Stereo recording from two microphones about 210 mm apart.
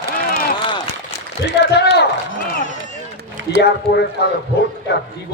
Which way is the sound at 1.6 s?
50° left (ahead or behind).